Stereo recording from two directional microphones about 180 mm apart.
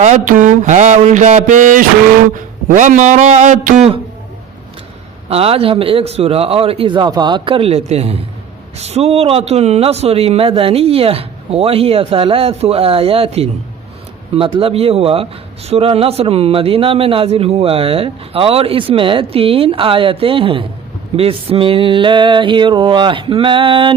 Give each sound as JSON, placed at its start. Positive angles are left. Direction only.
{"t": 0.0, "sound": "a sound", "side_deg": -45}
{"t": 5.3, "sound": "speech", "side_deg": -35}
{"t": 21.2, "sound": "mantra", "side_deg": -30}